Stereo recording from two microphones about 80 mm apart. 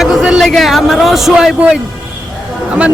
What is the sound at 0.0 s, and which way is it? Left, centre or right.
A man's voice, centre.